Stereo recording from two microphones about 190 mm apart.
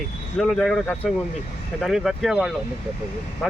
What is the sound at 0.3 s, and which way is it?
Speech, 5° left (ahead or behind).